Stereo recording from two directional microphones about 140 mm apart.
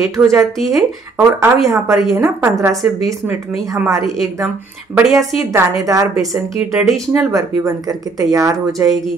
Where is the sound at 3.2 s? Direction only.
5° right (ahead or behind).